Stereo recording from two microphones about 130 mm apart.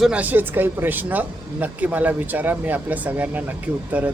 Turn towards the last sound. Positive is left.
turn(degrees=-15)  # may be behind; listen again after turning